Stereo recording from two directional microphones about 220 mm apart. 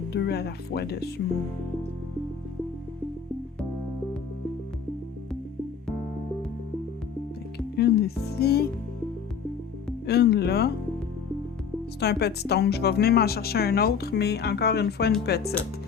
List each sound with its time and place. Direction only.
0.1 s speech: 45° left (ahead or behind)
7.8 s speech: 45° left (ahead or behind)
10.1 s speech: 45° left (ahead or behind)
11.9 s speech: 50° left (ahead or behind)